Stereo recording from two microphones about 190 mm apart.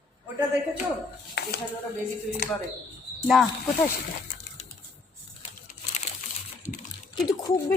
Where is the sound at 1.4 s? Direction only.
60° left (ahead or behind).